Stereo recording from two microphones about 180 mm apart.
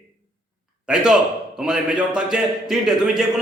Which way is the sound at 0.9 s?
5° right (ahead or behind).